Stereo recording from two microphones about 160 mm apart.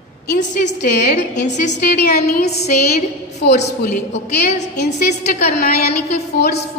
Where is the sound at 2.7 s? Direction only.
85° left.